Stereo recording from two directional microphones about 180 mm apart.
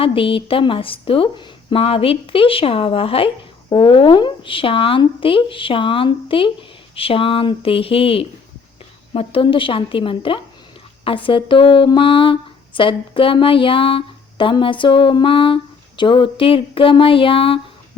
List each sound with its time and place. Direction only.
0.0 s a woman's voice: 30° left (ahead or behind)